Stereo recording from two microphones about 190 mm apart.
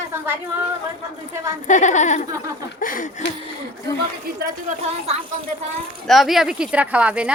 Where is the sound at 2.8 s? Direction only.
45° left (ahead or behind).